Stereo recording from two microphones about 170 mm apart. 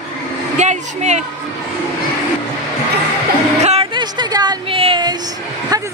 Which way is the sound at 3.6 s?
40° right (ahead or behind).